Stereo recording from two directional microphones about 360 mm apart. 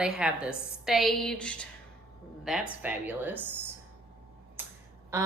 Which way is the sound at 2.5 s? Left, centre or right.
Centre.